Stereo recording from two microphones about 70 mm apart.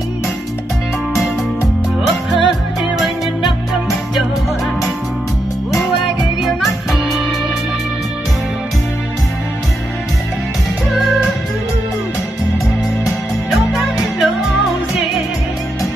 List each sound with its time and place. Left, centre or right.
2.4 s music: centre
6.4 s music: centre
13.0 s music: centre